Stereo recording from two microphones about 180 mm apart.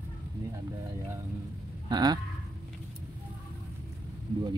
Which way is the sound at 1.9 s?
20° right (ahead or behind).